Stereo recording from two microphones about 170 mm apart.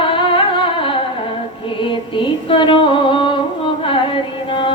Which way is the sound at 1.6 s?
30° left (ahead or behind).